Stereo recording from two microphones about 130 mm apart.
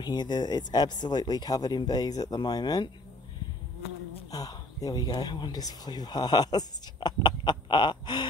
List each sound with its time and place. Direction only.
0.0 s speech: 35° left (ahead or behind)
4.3 s speech: 30° left (ahead or behind)